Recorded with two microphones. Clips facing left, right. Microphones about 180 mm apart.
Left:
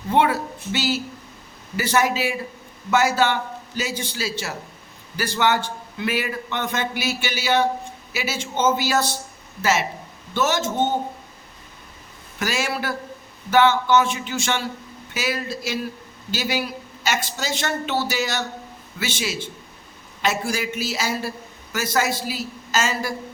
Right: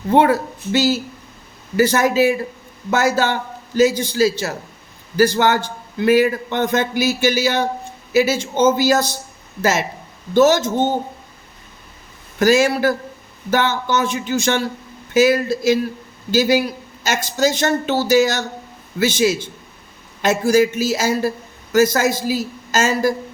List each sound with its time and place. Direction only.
0.1 s a man's voice: 40° right (ahead or behind)
12.4 s a man's voice: 40° right (ahead or behind)